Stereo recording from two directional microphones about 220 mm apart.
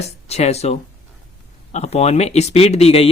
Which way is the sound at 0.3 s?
30° left (ahead or behind).